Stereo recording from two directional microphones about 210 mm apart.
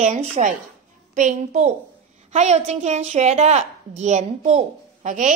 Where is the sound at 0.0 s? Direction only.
35° right (ahead or behind).